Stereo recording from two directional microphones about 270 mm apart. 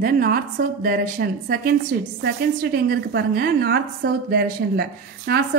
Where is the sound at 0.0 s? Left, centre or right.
Right.